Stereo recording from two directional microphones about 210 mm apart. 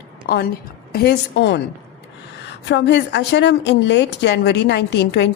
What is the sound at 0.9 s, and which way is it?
A woman's voice, 50° left (ahead or behind).